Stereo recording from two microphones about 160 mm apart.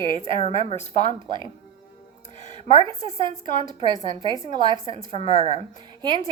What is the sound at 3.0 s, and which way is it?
A woman's voice, 30° right (ahead or behind).